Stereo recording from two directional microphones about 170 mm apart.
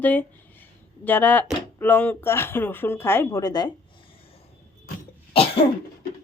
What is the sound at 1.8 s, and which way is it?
Speech, 10° left (ahead or behind).